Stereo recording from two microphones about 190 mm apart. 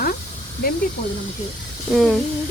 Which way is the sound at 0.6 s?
50° left (ahead or behind).